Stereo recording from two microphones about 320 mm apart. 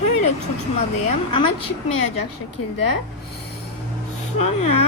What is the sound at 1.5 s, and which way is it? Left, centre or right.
Speech, left.